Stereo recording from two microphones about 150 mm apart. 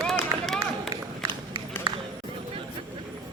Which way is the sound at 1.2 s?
20° right (ahead or behind).